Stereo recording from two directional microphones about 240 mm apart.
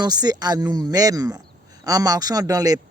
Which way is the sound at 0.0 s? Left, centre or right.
Centre.